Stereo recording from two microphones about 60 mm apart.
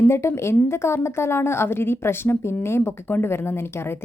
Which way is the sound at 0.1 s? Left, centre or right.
Left.